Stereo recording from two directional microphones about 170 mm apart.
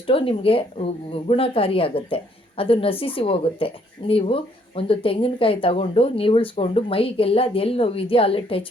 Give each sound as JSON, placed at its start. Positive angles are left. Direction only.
{"t": 0.1, "sound": "speech", "side_deg": 35}